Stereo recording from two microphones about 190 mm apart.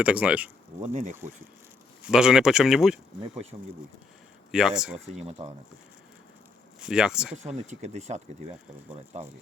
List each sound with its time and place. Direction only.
0.0 s speech: 5° right (ahead or behind)
0.8 s speech: 40° right (ahead or behind)
2.0 s speech: 5° right (ahead or behind)
4.5 s speech: 5° right (ahead or behind)
5.0 s speech: 35° right (ahead or behind)
6.7 s speech: 5° right (ahead or behind)
7.4 s speech: 35° right (ahead or behind)